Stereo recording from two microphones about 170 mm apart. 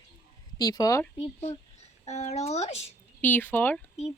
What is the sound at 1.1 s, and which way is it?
Speech, 40° left (ahead or behind).